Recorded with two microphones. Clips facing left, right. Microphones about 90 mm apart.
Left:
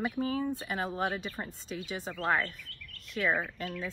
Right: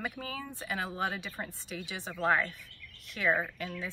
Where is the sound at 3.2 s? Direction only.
20° right (ahead or behind).